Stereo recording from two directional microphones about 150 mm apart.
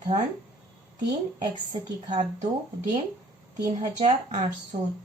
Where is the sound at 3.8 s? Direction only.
45° right (ahead or behind).